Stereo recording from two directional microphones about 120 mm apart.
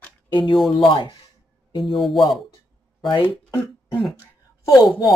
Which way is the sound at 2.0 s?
Centre (ahead or behind).